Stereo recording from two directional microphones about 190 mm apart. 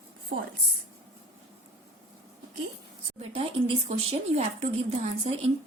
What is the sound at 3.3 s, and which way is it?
Speech, 30° right (ahead or behind).